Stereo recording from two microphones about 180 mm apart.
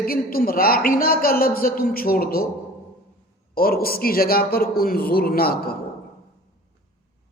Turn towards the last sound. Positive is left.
turn(degrees=55)  # may be behind; listen again after turning